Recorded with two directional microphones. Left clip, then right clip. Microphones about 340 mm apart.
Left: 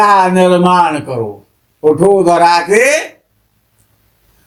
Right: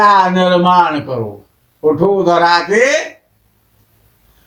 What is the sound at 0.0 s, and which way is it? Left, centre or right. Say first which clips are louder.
A man's voice: left 1 dB; left.